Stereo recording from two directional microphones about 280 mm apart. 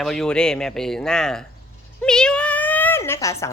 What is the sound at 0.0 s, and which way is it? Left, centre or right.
A woman's voice, centre.